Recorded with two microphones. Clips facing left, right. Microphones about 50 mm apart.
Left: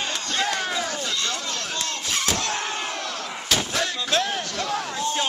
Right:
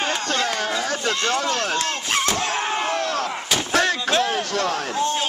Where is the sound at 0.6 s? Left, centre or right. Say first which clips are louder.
Right 3 dB; right.